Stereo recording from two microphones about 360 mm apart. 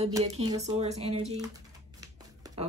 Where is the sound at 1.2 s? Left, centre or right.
Centre.